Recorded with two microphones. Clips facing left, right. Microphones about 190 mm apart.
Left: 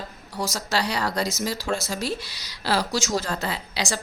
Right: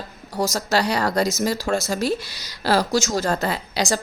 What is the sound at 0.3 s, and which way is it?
A woman's voice, 40° right (ahead or behind).